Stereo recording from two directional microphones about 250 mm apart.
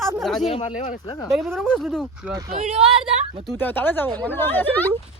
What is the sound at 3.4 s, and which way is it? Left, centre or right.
Speech, centre.